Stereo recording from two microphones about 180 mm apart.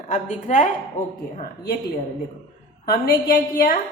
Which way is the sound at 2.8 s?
55° left (ahead or behind).